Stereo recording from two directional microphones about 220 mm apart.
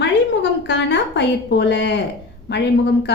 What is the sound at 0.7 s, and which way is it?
A woman's voice, 55° left (ahead or behind).